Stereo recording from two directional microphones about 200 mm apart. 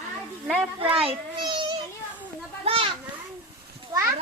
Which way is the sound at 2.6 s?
25° right (ahead or behind).